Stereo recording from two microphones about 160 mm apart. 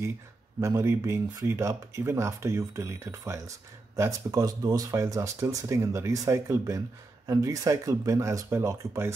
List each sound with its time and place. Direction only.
0.6 s speech: 20° right (ahead or behind)